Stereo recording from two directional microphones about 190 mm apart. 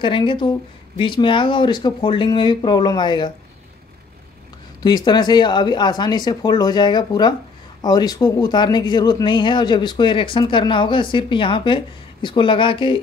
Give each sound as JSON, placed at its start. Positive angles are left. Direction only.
{"t": 0.0, "sound": "speech", "side_deg": 25}
{"t": 4.8, "sound": "speech", "side_deg": 20}